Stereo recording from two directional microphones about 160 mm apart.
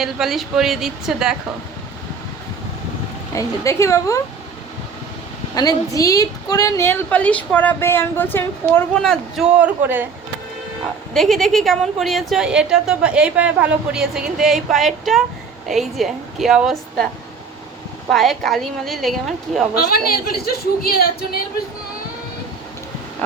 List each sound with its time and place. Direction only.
0.0 s a woman's voice: centre (ahead or behind)
3.3 s a woman's voice: 20° left (ahead or behind)
5.5 s a woman's voice: 20° left (ahead or behind); by 9.5 s 5° left (ahead or behind)
9.6 s a man's voice: 10° right (ahead or behind)
11.1 s a woman's voice: centre (ahead or behind)
18.1 s a woman's voice: centre (ahead or behind)
19.7 s a man's voice: 75° left (ahead or behind)